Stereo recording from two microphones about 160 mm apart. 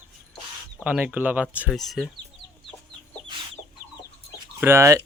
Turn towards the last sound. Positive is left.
turn(degrees=-15)  # may be behind; listen again after turning